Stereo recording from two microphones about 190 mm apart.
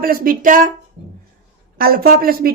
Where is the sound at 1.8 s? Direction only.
50° right (ahead or behind).